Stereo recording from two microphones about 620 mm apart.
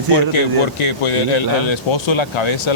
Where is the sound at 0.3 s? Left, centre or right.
Left.